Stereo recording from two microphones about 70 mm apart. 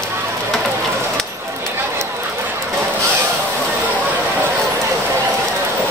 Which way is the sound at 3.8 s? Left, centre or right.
Right.